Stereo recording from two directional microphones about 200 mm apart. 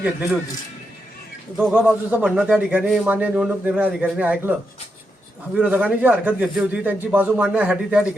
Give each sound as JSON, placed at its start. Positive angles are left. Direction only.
{"t": 1.5, "sound": "a man's voice", "side_deg": -5}
{"t": 5.5, "sound": "a man's voice", "side_deg": -5}